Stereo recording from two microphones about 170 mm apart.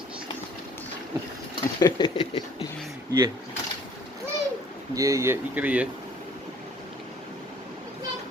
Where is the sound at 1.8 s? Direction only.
25° left (ahead or behind).